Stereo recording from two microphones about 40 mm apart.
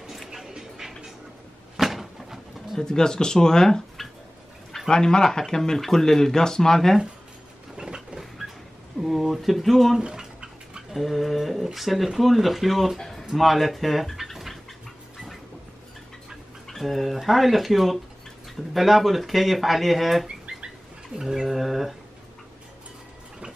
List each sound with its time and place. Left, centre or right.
0.3 s a sound: centre
2.8 s speech: centre
4.8 s speech: centre
7.7 s a sound: centre
9.0 s speech: centre
9.9 s a sound: centre
10.9 s speech: centre
16.6 s speech: centre
20.5 s bird: right
21.2 s mantra: centre
21.5 s speech: centre